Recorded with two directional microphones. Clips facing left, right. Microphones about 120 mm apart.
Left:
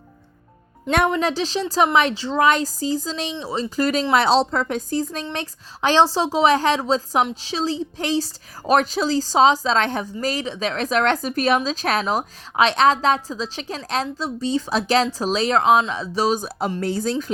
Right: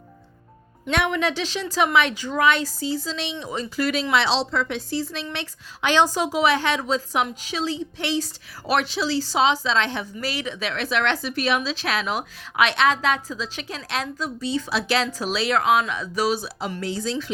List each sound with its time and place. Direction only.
0.9 s a woman's voice: 40° left (ahead or behind)